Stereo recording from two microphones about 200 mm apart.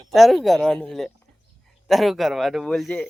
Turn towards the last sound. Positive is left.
turn(degrees=5)  # may be behind; listen again after turning